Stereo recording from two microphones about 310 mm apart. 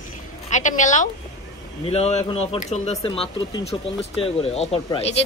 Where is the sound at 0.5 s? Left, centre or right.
Left.